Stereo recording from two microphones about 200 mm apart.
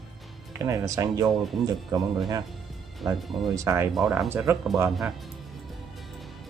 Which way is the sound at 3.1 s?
Centre (ahead or behind).